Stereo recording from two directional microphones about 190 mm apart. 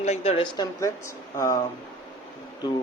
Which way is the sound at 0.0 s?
35° left (ahead or behind).